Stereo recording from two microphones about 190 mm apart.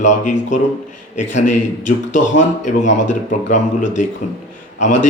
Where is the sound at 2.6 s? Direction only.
40° left (ahead or behind).